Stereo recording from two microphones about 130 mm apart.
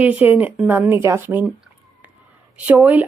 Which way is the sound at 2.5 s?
10° right (ahead or behind).